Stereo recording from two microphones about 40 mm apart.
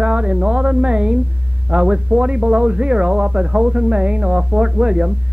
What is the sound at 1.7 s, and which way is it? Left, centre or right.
A man's voice, right.